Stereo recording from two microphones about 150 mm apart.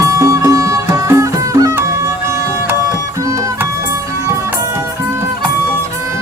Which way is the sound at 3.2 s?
20° right (ahead or behind).